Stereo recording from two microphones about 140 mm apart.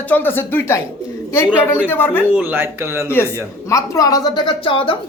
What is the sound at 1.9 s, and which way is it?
Speech, 15° left (ahead or behind).